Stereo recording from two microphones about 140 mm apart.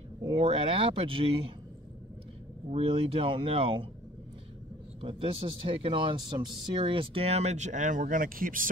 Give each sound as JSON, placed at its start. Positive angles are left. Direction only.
{"t": 0.2, "sound": "speech", "side_deg": -40}
{"t": 2.7, "sound": "speech", "side_deg": -45}
{"t": 5.0, "sound": "speech", "side_deg": -40}